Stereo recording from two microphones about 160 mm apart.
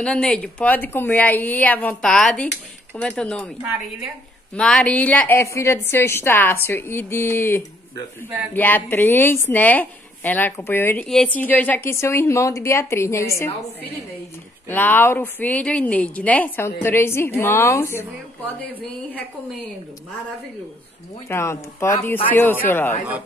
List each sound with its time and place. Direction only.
0.0 s a woman's voice: 5° left (ahead or behind)
4.6 s a woman's voice: 5° left (ahead or behind)
14.7 s a woman's voice: 10° left (ahead or behind)
21.3 s a woman's voice: 15° left (ahead or behind)